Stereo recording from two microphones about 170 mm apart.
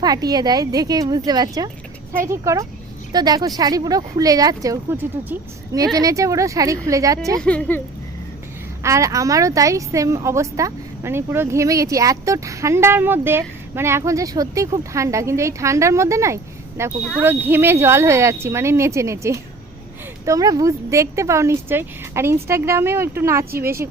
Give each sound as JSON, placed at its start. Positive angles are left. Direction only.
{"t": 0.0, "sound": "speech", "side_deg": -20}
{"t": 7.3, "sound": "speech", "side_deg": 5}
{"t": 8.8, "sound": "a woman's voice", "side_deg": -20}